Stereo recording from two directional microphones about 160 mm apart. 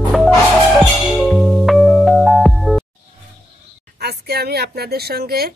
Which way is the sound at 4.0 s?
90° right.